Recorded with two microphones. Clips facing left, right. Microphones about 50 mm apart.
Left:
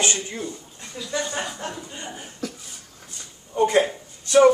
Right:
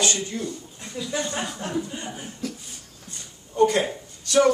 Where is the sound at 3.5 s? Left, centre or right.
Centre.